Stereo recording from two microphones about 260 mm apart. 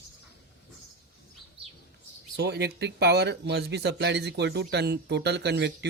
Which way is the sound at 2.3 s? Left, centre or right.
Right.